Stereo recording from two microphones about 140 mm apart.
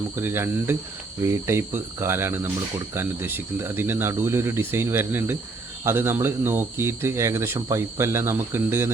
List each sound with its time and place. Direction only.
0.2 s speech: 15° right (ahead or behind)